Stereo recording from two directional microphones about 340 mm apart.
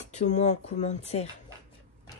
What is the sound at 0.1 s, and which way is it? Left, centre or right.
Speech, centre.